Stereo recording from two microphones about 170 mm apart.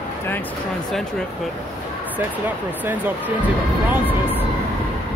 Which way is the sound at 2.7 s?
10° right (ahead or behind).